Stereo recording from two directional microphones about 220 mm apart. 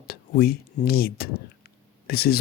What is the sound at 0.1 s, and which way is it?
Speech, 45° left (ahead or behind).